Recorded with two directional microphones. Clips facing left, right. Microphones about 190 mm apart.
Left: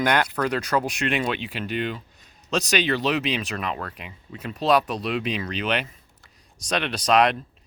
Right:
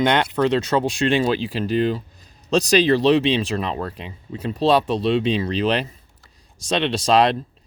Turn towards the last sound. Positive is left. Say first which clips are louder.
# right 3 dB
turn(degrees=-30)  # may be behind; listen again after turning